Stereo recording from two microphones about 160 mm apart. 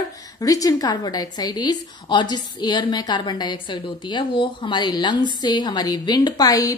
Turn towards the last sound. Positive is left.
turn(degrees=20)  # may be behind; listen again after turning